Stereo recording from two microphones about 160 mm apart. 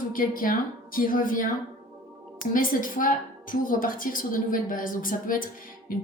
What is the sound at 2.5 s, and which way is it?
A woman's voice, 60° left (ahead or behind).